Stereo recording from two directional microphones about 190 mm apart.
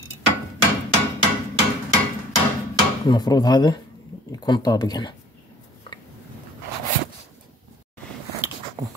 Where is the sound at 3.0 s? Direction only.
20° left (ahead or behind).